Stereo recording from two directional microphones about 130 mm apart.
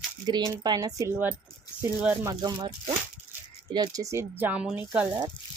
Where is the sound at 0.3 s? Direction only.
35° right (ahead or behind).